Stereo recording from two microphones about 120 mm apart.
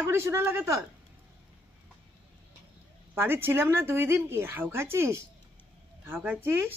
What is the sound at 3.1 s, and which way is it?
A woman's voice, 20° right (ahead or behind).